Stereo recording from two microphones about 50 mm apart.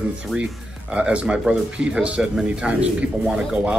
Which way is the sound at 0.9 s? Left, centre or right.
Right.